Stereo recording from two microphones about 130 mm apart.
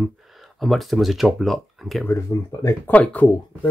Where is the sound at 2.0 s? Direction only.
25° left (ahead or behind).